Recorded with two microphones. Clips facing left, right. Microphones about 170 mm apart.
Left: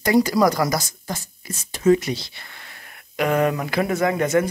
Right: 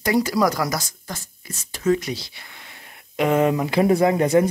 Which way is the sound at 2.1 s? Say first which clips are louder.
Left 2 dB; 10° right (ahead or behind).